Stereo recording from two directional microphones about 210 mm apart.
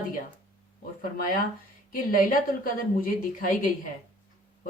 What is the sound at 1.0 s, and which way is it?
Speech, 40° left (ahead or behind).